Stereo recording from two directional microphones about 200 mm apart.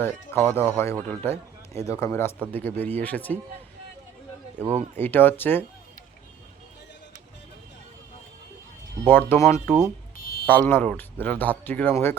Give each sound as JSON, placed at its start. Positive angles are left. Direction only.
{"t": 0.0, "sound": "a man's voice", "side_deg": 10}
{"t": 4.9, "sound": "a man's voice", "side_deg": 10}
{"t": 9.0, "sound": "a man's voice", "side_deg": 10}
{"t": 10.2, "sound": "a sound", "side_deg": 50}
{"t": 10.4, "sound": "a man's voice", "side_deg": 10}